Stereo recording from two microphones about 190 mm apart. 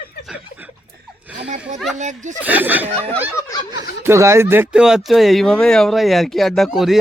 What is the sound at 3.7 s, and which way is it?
Speech, 15° right (ahead or behind).